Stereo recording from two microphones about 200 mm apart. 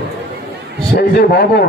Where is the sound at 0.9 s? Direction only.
55° left (ahead or behind).